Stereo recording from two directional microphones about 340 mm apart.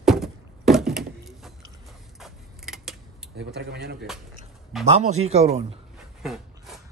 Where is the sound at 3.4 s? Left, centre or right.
Right.